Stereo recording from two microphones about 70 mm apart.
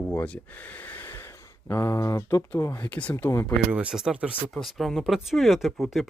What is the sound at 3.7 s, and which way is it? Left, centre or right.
Speech, centre.